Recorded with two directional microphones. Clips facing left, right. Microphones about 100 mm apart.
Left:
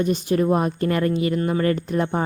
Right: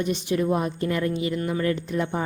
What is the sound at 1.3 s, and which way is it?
Speech, 40° left (ahead or behind).